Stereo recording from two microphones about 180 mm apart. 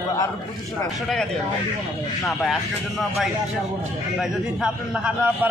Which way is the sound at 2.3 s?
Centre (ahead or behind).